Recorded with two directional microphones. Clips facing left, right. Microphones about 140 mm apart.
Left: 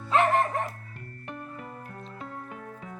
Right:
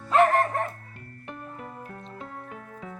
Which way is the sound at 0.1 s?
Centre (ahead or behind).